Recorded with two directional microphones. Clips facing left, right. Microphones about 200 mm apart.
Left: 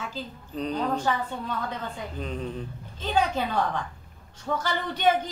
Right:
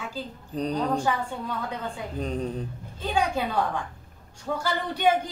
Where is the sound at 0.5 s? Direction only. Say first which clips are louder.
Right 2 dB; 40° right (ahead or behind).